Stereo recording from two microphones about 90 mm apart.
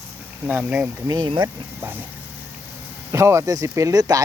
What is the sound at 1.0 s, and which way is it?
Speech, 50° right (ahead or behind).